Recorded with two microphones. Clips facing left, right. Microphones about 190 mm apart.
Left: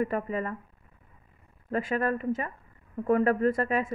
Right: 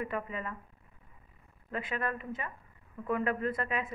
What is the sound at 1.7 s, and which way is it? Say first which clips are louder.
A woman's voice: left 8 dB; 45° left (ahead or behind).